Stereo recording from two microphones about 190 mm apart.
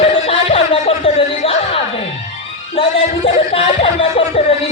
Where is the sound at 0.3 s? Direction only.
30° left (ahead or behind).